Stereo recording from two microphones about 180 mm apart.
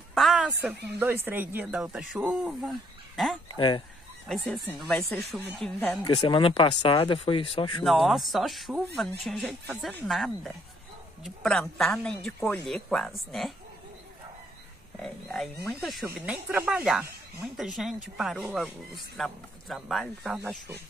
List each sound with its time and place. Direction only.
0.1 s a woman's voice: centre (ahead or behind)
3.5 s speech: 25° left (ahead or behind)
4.3 s speech: 5° left (ahead or behind)
6.1 s speech: 30° left (ahead or behind)
7.8 s speech: centre (ahead or behind)
15.0 s speech: 5° left (ahead or behind)
20.3 s a woman's voice: 10° right (ahead or behind)